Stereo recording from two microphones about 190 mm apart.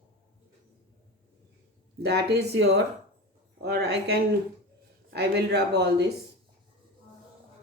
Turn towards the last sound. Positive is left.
turn(degrees=-65)  # may be behind; listen again after turning